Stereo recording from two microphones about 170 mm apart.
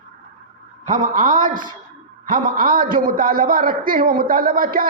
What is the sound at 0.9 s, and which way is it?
A man's voice, 50° right (ahead or behind).